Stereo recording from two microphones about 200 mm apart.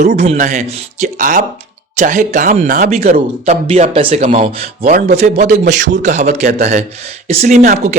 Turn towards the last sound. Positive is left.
turn(degrees=-35)  # may be behind; listen again after turning